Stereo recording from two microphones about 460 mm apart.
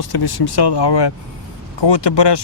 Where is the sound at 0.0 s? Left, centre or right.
Left.